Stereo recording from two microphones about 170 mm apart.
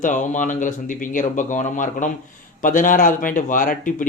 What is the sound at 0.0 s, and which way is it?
Speech, 50° left (ahead or behind).